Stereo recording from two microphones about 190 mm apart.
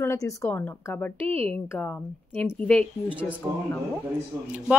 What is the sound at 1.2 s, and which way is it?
Speech, 30° right (ahead or behind).